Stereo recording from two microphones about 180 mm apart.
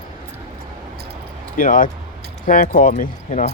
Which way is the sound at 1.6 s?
50° left (ahead or behind).